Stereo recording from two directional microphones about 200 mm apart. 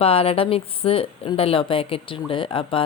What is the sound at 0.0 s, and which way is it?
A woman's voice, 30° left (ahead or behind).